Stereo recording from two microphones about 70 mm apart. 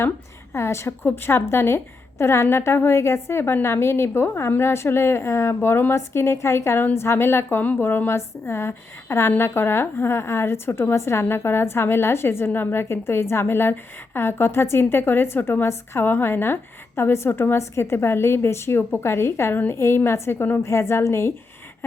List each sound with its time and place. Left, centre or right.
0.5 s a woman's voice: left